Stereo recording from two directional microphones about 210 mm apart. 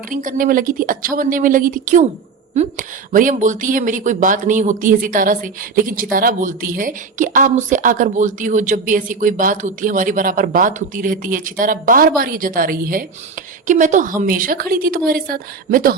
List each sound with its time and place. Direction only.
0.1 s a woman's voice: 40° right (ahead or behind)